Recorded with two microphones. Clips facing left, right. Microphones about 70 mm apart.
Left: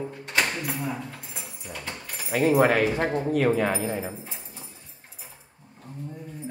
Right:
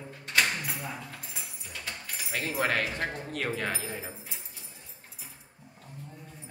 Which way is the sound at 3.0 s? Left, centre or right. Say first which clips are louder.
Left 8 dB; left.